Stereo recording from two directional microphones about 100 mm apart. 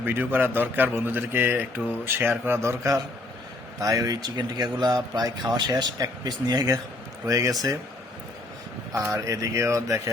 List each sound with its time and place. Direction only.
0.0 s a man's voice: 20° right (ahead or behind); by 7.8 s 35° right (ahead or behind)
9.0 s speech: 25° right (ahead or behind)